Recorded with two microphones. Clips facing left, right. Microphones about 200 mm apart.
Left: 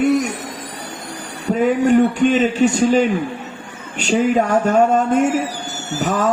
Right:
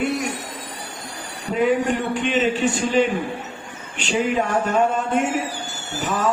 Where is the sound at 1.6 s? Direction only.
40° left (ahead or behind).